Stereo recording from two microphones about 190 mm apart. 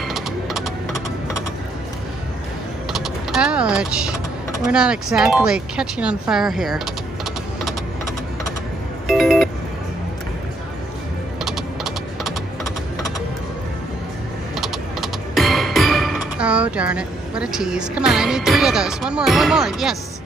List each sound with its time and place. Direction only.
0.0 s a sound: centre (ahead or behind)
2.9 s vehicle: centre (ahead or behind)
4.6 s speech: 5° right (ahead or behind)
9.0 s music: centre (ahead or behind)
11.4 s typing: centre (ahead or behind)
14.5 s music: centre (ahead or behind)